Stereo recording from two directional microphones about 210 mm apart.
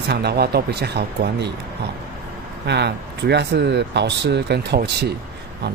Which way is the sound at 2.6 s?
55° right (ahead or behind).